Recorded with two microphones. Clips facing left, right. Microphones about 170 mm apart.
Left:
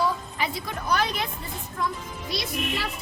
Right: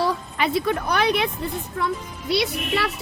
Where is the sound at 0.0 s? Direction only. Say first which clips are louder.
Right 4 dB; 70° right (ahead or behind).